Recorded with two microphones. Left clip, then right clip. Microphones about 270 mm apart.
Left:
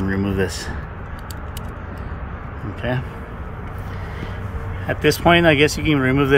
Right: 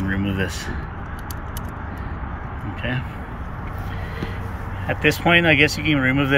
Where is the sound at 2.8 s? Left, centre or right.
Centre.